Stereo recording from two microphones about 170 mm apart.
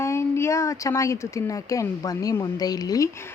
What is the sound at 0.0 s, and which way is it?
A woman's voice, 15° left (ahead or behind).